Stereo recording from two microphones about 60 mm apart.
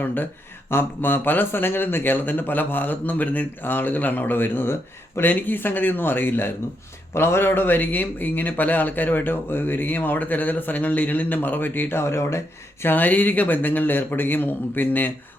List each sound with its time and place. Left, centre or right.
0.0 s a man's voice: left
12.8 s a man's voice: left